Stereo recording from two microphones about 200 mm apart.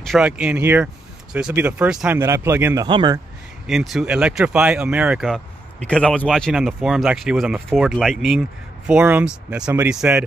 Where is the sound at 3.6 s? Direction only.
Centre (ahead or behind).